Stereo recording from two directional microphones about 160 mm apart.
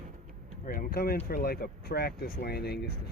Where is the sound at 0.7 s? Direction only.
70° left (ahead or behind).